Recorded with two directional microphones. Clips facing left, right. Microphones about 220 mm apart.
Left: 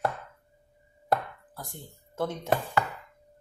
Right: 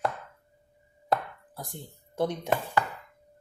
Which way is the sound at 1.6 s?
15° right (ahead or behind).